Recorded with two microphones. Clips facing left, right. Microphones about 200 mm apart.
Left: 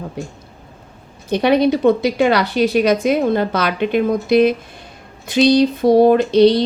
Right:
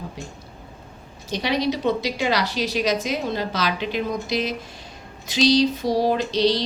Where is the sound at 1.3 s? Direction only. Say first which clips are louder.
Left 9 dB; 55° left (ahead or behind).